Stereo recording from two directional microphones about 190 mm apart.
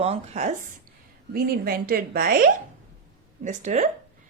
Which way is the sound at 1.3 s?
50° right (ahead or behind).